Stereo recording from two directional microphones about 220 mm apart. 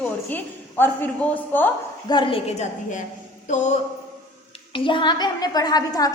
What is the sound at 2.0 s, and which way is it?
Speech, 20° left (ahead or behind).